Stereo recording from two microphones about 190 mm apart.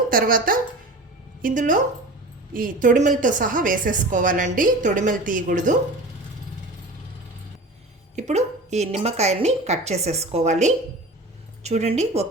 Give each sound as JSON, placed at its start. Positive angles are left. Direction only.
{"t": 0.1, "sound": "a woman's voice", "side_deg": -50}
{"t": 8.1, "sound": "a woman's voice", "side_deg": -35}